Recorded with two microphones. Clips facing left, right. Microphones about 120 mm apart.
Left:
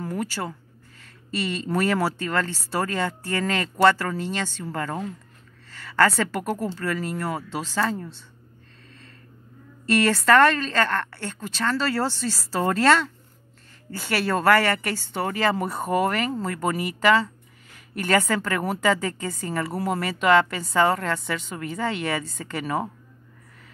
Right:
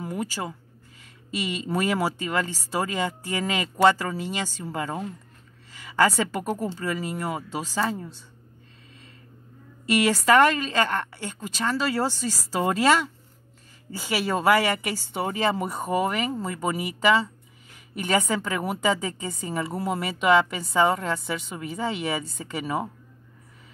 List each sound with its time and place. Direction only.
0.0 s a woman's voice: 15° right (ahead or behind)
9.8 s a woman's voice: 10° right (ahead or behind)